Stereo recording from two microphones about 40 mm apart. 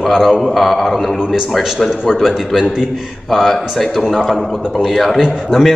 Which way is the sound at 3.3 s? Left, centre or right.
Centre.